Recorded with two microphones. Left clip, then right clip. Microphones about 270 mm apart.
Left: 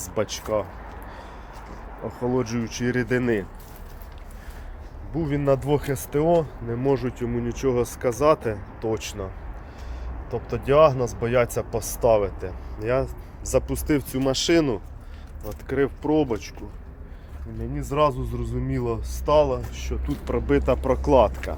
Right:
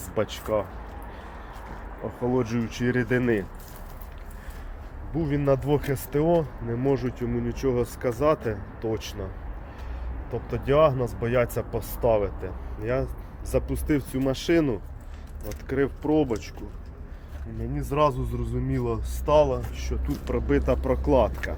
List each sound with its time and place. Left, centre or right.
0.2 s a man's voice: centre
2.2 s a man's voice: centre
5.1 s a man's voice: centre
10.3 s a man's voice: centre
17.8 s a man's voice: centre